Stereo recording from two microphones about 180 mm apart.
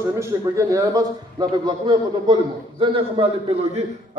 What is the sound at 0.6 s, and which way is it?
Speech, 20° right (ahead or behind).